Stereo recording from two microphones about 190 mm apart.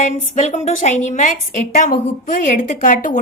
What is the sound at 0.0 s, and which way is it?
A woman's voice, 40° left (ahead or behind).